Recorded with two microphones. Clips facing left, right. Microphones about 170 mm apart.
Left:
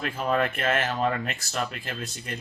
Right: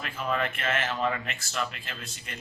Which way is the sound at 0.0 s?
40° left (ahead or behind).